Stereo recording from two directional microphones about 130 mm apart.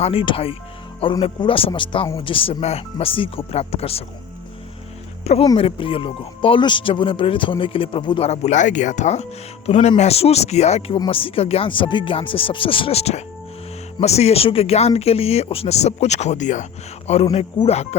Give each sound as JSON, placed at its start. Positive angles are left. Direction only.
{"t": 0.0, "sound": "speech", "side_deg": 45}
{"t": 5.2, "sound": "speech", "side_deg": 55}
{"t": 8.3, "sound": "speech", "side_deg": 65}
{"t": 9.6, "sound": "speech", "side_deg": 50}
{"t": 10.9, "sound": "speech", "side_deg": 40}
{"t": 17.3, "sound": "speech", "side_deg": 50}